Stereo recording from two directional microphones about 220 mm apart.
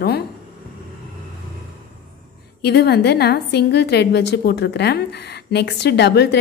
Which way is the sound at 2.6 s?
50° left (ahead or behind).